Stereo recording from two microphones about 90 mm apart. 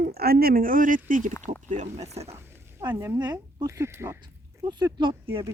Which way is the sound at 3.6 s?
30° right (ahead or behind).